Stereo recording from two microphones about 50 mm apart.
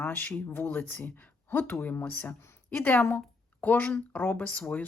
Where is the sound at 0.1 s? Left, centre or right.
Left.